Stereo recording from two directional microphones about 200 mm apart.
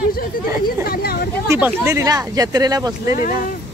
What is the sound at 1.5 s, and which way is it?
Speech, 10° right (ahead or behind).